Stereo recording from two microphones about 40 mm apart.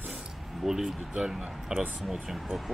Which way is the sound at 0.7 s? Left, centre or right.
Centre.